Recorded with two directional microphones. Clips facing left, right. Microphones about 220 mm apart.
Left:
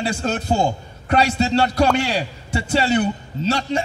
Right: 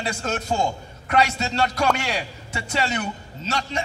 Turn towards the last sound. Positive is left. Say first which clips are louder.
# left 7 dB
turn(degrees=30)  # may be behind; listen again after turning